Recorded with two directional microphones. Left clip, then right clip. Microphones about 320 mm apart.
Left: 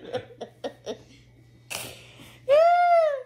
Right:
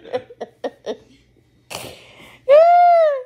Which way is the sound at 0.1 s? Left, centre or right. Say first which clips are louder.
Right 8 dB; right.